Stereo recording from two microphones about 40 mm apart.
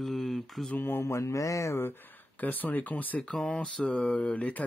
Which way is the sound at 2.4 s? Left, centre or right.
Left.